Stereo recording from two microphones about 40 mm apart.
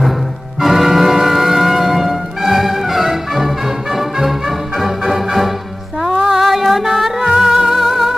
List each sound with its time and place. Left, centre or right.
0.6 s music: centre
6.4 s music: centre